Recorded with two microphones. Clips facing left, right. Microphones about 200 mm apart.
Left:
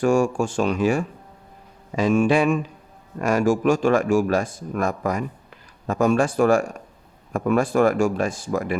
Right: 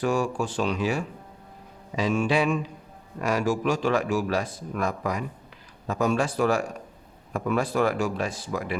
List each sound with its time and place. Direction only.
0.0 s speech: 45° left (ahead or behind)